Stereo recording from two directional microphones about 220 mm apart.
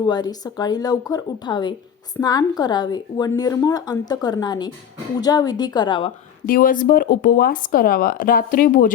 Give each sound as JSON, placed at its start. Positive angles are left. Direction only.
{"t": 0.0, "sound": "a woman's voice", "side_deg": 20}
{"t": 6.4, "sound": "speech", "side_deg": 40}